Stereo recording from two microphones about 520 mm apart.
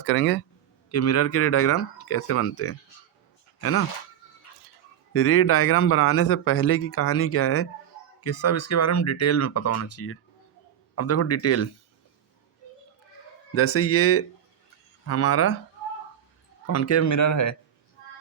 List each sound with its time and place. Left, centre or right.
0.0 s speech: left
5.1 s speech: left
13.5 s speech: left
16.6 s a man's voice: left